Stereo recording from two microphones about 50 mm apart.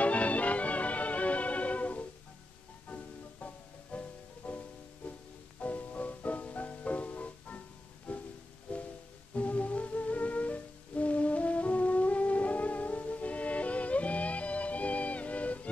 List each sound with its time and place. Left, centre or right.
0.0 s music: left